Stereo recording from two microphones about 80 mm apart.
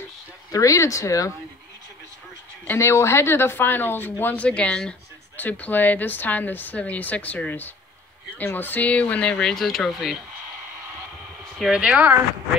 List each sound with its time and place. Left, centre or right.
0.5 s speech: left
2.8 s a woman's voice: left; by 10.1 s centre
11.7 s speech: centre